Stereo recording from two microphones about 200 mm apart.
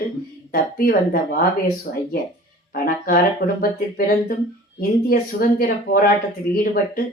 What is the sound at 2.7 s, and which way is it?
Speech, 45° left (ahead or behind).